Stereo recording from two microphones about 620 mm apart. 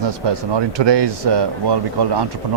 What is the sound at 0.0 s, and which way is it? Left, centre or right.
Speech, right.